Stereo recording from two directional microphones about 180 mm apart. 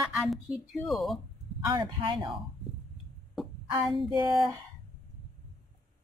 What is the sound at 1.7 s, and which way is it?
Speech, 25° right (ahead or behind).